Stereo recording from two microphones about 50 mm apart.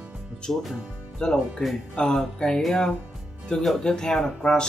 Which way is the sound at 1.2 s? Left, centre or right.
Centre.